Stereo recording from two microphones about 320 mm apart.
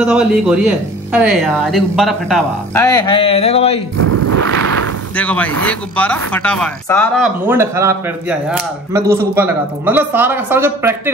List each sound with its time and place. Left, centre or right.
0.0 s speech: centre
4.0 s a sound: right
5.1 s speech: centre
7.4 s speech: centre